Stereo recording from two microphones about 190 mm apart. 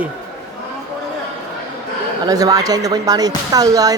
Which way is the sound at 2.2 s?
20° right (ahead or behind).